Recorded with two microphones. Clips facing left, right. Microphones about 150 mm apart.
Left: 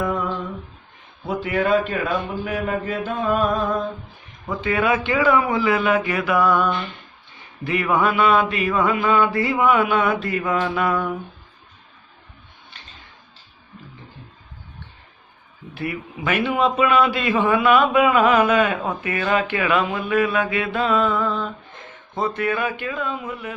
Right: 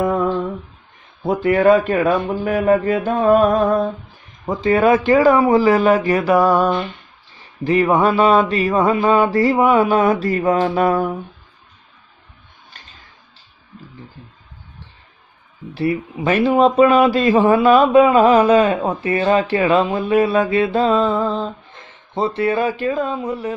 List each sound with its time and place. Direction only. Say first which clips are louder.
1.2 s a man's voice: right 8 dB; 45° right (ahead or behind)
12.7 s a sound: right 1 dB; 45° right (ahead or behind)
15.7 s a man's voice: right 8 dB; 35° right (ahead or behind)